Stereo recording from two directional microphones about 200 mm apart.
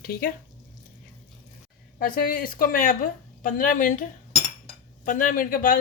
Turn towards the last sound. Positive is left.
turn(degrees=45)  # may be behind; listen again after turning